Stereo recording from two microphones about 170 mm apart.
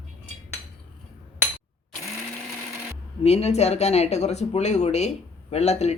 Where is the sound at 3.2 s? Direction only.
40° left (ahead or behind).